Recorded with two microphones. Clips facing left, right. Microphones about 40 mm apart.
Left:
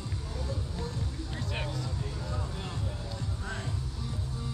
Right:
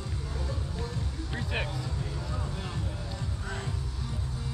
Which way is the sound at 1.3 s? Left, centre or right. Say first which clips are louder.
Right 5 dB; right.